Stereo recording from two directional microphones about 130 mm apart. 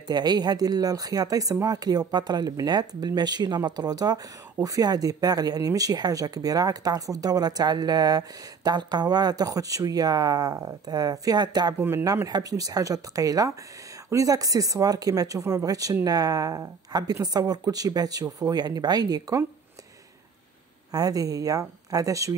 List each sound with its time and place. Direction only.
0.1 s speech: 30° right (ahead or behind)
11.7 s speech: 15° right (ahead or behind)
20.9 s speech: 30° right (ahead or behind)